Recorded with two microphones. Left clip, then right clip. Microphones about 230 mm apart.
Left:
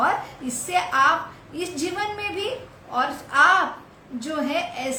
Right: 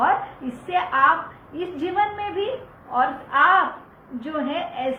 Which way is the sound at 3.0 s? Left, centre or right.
Left.